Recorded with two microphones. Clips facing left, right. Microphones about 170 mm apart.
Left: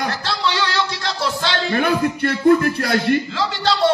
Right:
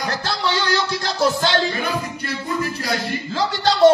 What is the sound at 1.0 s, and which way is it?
Music, 45° right (ahead or behind).